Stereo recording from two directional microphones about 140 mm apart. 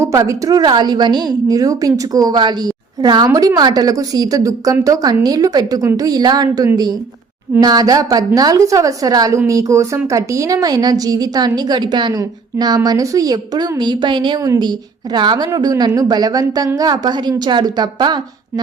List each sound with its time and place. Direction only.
0.0 s a woman's voice: 20° right (ahead or behind)